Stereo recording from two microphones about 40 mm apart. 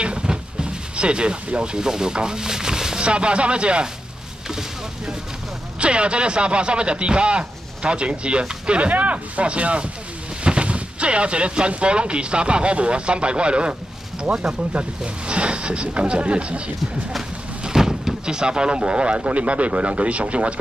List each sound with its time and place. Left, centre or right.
0.0 s a sound: right
3.1 s speech: right
4.5 s boat: centre
5.8 s speech: right
17.6 s speech: centre; by 20.5 s right